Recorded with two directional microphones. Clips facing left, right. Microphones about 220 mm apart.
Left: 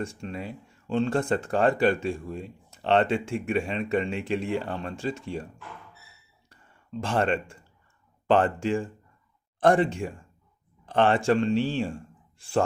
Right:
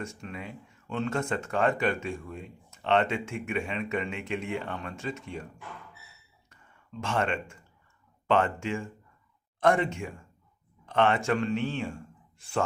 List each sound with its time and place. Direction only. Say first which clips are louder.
0.0 s speech: left 5 dB; 30° left (ahead or behind)
7.0 s speech: left 4 dB; 35° left (ahead or behind)